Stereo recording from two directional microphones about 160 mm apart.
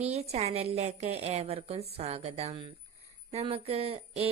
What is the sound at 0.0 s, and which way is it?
A woman's voice, 40° right (ahead or behind).